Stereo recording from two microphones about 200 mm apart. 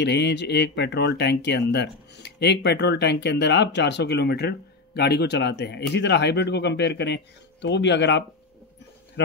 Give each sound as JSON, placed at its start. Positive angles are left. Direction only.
{"t": 0.0, "sound": "speech", "side_deg": 60}